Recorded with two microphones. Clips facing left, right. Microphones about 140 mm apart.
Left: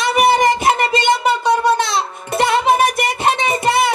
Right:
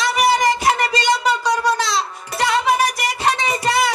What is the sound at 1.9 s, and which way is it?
Music, 25° left (ahead or behind).